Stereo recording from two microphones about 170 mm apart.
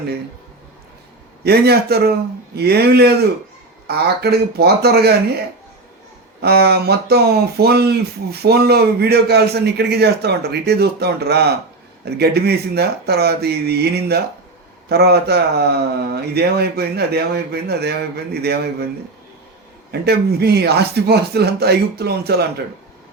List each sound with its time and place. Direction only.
1.5 s speech: 70° right (ahead or behind)
6.4 s speech: 70° right (ahead or behind)
19.9 s speech: 70° right (ahead or behind)